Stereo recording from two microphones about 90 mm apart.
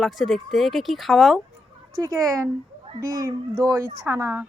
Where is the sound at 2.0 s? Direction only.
35° right (ahead or behind).